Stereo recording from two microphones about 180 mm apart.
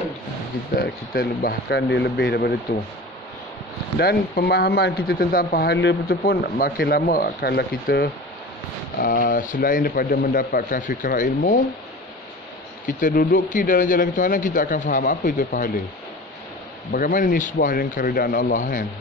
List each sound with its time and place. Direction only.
0.7 s speech: 55° left (ahead or behind)
4.0 s speech: 60° left (ahead or behind)
9.0 s speech: 50° left (ahead or behind)
12.8 s speech: 50° left (ahead or behind)
16.9 s speech: 50° left (ahead or behind)